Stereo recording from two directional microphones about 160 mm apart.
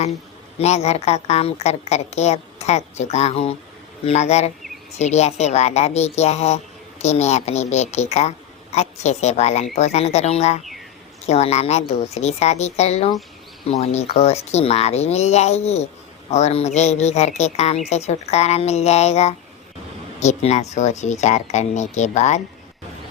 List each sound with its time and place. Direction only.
0.6 s a woman's voice: 45° left (ahead or behind)